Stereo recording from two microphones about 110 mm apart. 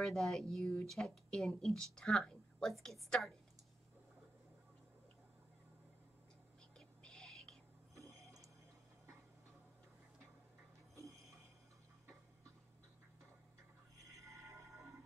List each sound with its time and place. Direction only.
0.0 s speech: 5° left (ahead or behind)
7.0 s whispering: 5° left (ahead or behind)
7.9 s a sound: 30° right (ahead or behind)